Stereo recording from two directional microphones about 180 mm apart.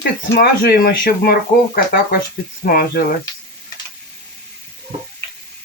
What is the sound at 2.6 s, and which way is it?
Speech, 55° left (ahead or behind).